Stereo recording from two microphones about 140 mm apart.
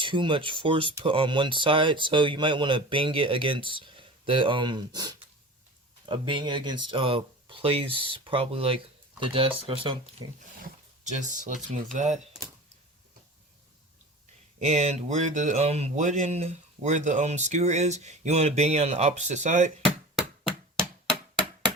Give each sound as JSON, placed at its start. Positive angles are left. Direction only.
{"t": 0.0, "sound": "speech", "side_deg": -35}
{"t": 10.6, "sound": "speech", "side_deg": -60}
{"t": 14.6, "sound": "speech", "side_deg": -55}